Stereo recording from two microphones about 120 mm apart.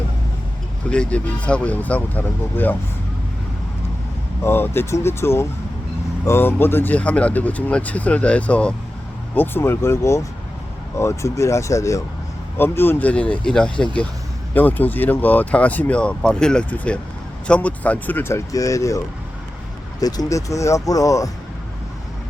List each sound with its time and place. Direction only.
0.9 s speech: 10° left (ahead or behind)
4.4 s speech: 20° left (ahead or behind)